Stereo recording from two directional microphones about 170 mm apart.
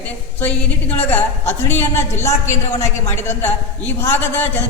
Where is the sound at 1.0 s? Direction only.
10° left (ahead or behind).